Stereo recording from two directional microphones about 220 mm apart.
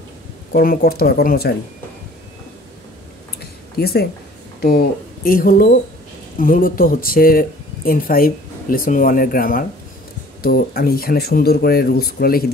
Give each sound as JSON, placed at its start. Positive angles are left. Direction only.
{"t": 0.5, "sound": "speech", "side_deg": 40}
{"t": 3.7, "sound": "speech", "side_deg": 45}
{"t": 5.2, "sound": "speech", "side_deg": 40}